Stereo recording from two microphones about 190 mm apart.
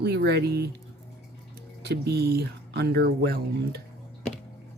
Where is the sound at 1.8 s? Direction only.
60° right (ahead or behind).